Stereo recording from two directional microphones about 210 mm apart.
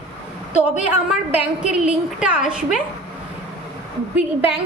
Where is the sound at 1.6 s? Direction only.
5° right (ahead or behind).